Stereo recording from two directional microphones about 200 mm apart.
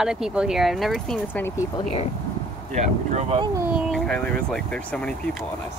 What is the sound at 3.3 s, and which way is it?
Speech, 15° right (ahead or behind).